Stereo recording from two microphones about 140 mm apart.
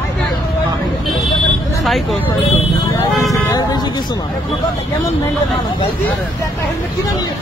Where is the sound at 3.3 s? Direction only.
30° left (ahead or behind).